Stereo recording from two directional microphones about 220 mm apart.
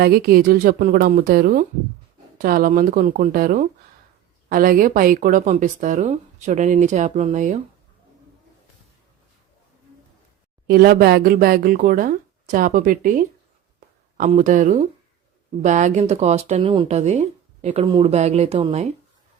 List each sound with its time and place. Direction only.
0.0 s speech: 45° right (ahead or behind)
10.7 s speech: 45° right (ahead or behind)
13.7 s a sound: 35° right (ahead or behind)
15.6 s speech: 35° right (ahead or behind)